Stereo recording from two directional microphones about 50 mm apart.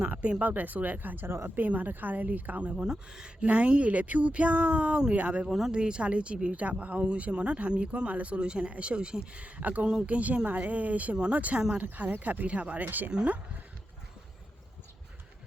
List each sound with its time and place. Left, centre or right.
0.0 s speech: right
2.7 s speech: centre
3.4 s speech: right
5.5 s speech: centre
5.7 s speech: centre; by 13.1 s right
13.1 s speech: right